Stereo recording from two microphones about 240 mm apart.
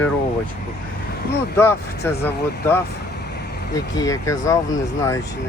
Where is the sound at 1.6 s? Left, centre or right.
Centre.